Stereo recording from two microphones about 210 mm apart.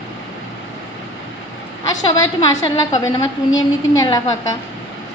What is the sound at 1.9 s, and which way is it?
A woman's voice, 20° left (ahead or behind).